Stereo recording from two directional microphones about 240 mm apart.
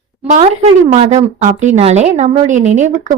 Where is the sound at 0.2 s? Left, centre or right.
Right.